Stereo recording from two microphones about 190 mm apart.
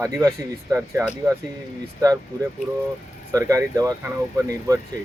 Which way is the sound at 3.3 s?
15° right (ahead or behind).